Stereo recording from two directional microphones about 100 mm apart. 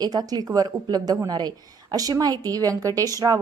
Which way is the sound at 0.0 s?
40° right (ahead or behind).